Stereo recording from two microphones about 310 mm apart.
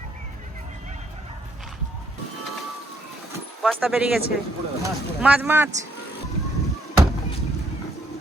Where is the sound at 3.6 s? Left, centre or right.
Centre.